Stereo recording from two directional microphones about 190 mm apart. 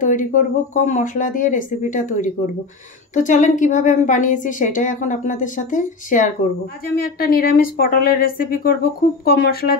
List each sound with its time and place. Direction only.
0.0 s a woman's voice: 40° left (ahead or behind)